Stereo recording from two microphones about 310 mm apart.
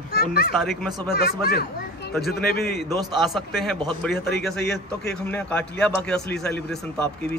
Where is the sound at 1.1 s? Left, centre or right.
Left.